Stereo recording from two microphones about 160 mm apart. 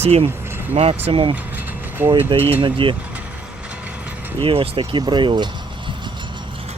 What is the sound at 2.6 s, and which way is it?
Speech, 30° right (ahead or behind).